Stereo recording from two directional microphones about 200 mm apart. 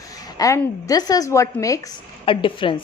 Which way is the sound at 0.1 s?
20° left (ahead or behind).